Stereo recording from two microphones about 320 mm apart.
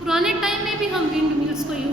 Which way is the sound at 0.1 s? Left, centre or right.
Centre.